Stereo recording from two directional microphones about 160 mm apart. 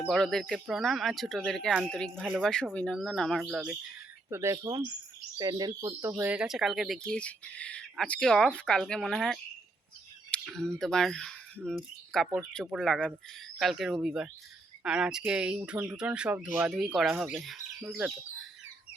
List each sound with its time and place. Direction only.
0.1 s speech: centre (ahead or behind)
4.3 s speech: 15° right (ahead or behind)
6.3 s speech: 5° right (ahead or behind)
10.4 s speech: 5° left (ahead or behind)